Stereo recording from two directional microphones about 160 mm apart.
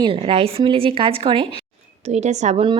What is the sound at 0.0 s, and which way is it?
Speech, 35° right (ahead or behind).